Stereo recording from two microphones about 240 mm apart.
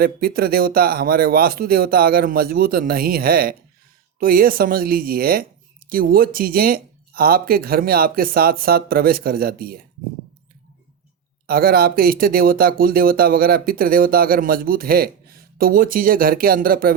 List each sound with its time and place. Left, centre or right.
0.0 s speech: right
11.4 s speech: right